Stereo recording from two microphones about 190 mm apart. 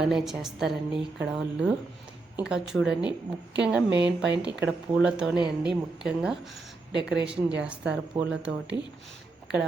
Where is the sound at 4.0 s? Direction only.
5° right (ahead or behind).